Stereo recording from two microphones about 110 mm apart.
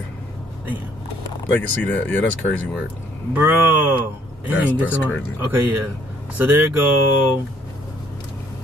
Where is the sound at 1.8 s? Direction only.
15° left (ahead or behind).